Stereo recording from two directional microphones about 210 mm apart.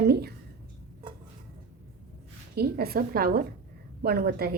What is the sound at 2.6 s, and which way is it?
A woman's voice, 45° right (ahead or behind).